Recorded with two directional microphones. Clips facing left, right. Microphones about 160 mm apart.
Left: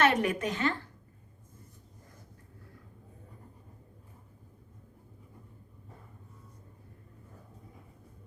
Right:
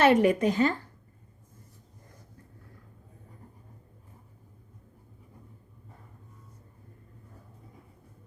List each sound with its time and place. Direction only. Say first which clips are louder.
0.0 s speech: right 6 dB; 30° right (ahead or behind)